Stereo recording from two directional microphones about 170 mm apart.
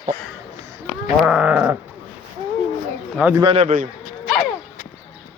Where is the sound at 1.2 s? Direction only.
5° right (ahead or behind).